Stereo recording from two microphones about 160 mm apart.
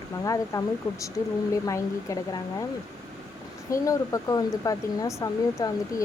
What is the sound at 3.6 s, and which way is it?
Speech, 20° left (ahead or behind).